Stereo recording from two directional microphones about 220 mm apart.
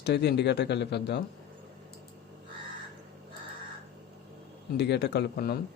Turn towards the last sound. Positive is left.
turn(degrees=45)  # may be behind; listen again after turning